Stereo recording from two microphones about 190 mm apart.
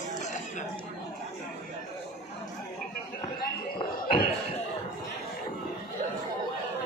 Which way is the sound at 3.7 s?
25° left (ahead or behind).